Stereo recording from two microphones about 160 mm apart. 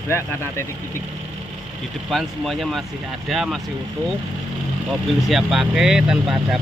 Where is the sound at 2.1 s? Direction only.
Centre (ahead or behind).